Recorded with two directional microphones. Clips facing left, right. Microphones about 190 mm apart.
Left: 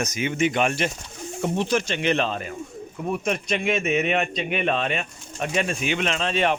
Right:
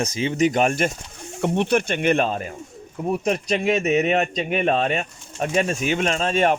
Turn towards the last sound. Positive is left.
turn(degrees=-45)  # may be behind; listen again after turning